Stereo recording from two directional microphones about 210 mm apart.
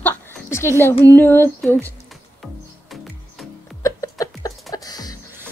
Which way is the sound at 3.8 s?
15° left (ahead or behind).